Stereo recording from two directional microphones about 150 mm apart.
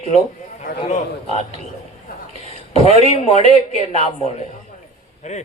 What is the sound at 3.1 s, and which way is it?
A woman's voice, 45° left (ahead or behind).